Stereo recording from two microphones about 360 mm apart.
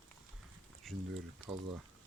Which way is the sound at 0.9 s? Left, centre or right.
Centre.